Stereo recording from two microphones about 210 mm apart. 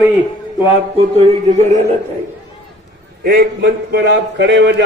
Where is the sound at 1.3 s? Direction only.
30° right (ahead or behind).